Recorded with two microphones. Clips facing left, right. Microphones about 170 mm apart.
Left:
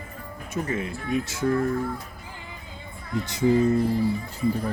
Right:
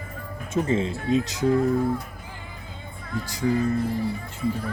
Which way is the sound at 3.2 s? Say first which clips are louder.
Left 3 dB; 25° left (ahead or behind).